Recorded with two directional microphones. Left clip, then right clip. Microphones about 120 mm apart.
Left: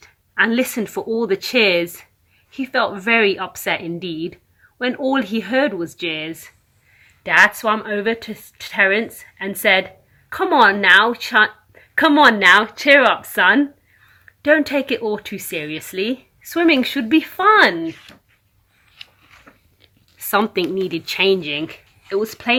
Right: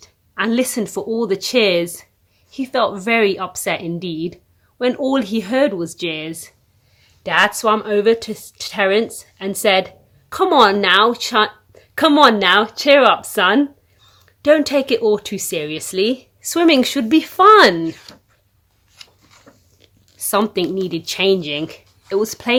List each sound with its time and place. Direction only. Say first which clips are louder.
0.3 s speech: left 2 dB; 30° right (ahead or behind)
0.6 s speech: right 1 dB; 20° right (ahead or behind)
1.0 s a woman's voice: even; 30° right (ahead or behind); by 17.9 s 90° right
19.5 s biting: even; 15° left (ahead or behind)
20.3 s a woman's voice: even; 35° right (ahead or behind)
22.2 s speech: even; 55° right (ahead or behind)